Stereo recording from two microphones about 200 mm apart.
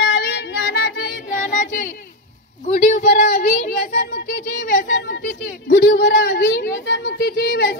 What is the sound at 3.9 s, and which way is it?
Speech, 60° left (ahead or behind).